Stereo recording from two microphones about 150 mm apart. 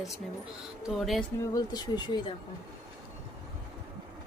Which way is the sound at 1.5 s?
25° left (ahead or behind).